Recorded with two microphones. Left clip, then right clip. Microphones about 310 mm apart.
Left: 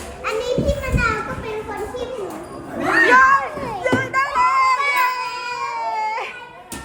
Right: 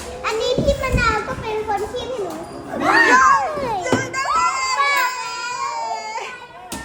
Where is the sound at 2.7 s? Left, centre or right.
Centre.